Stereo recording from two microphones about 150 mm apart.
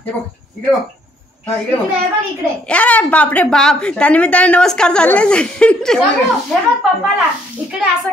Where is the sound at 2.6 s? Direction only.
10° left (ahead or behind).